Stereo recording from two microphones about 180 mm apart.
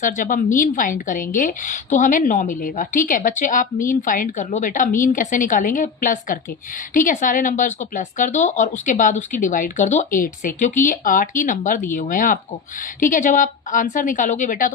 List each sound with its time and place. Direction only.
0.0 s a woman's voice: 50° left (ahead or behind)